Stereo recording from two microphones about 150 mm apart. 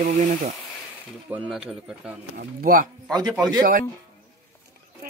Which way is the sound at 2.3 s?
75° right (ahead or behind).